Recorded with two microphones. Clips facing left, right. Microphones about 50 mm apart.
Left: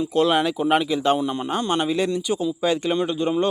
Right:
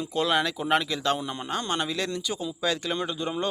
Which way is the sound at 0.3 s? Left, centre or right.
Centre.